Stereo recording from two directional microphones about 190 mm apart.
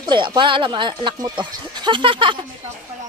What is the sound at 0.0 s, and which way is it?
Speech, 25° right (ahead or behind).